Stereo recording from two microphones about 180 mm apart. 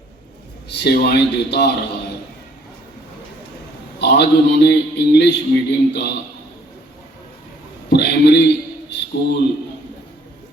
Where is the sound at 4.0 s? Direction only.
70° left (ahead or behind).